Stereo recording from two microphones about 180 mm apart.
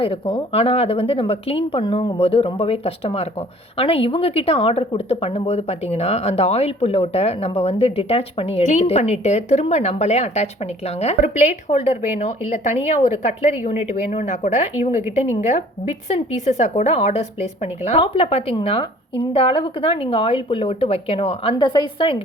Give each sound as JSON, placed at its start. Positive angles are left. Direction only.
{"t": 0.0, "sound": "a woman's voice", "side_deg": 30}